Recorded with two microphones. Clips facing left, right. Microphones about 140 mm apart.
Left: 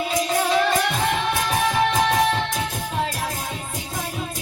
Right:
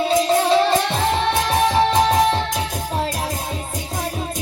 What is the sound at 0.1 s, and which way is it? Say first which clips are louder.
Music: right 5 dB; 30° right (ahead or behind).